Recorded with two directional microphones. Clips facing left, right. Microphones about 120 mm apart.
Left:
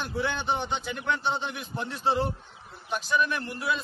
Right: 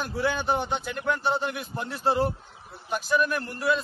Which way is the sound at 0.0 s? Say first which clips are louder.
Right 3 dB; 5° right (ahead or behind).